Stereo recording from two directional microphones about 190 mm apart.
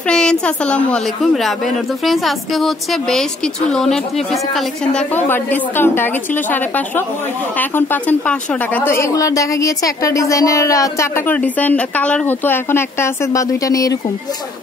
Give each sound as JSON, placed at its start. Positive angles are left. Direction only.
{"t": 0.1, "sound": "a woman's voice", "side_deg": 5}
{"t": 7.5, "sound": "speech", "side_deg": 10}